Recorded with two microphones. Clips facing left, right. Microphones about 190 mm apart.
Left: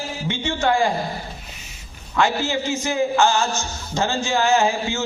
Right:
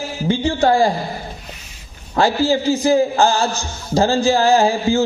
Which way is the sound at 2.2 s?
35° right (ahead or behind).